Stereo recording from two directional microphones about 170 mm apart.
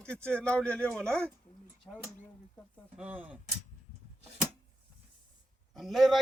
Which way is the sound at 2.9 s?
10° right (ahead or behind).